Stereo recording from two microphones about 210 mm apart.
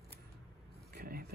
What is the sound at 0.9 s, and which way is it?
Vehicle, 50° right (ahead or behind).